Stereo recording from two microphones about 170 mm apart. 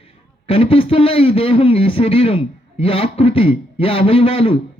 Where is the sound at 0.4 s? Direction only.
35° left (ahead or behind).